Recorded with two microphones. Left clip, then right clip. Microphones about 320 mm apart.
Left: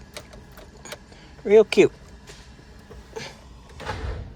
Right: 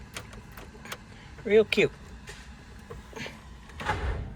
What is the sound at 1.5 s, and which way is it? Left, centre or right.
Speech, centre.